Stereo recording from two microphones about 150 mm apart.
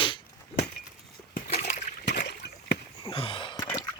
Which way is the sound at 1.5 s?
45° left (ahead or behind).